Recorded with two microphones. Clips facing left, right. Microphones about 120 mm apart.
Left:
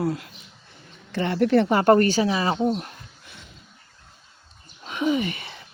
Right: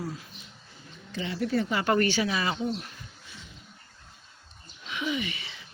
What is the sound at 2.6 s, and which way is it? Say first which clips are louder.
Speech: left 8 dB; 55° left (ahead or behind).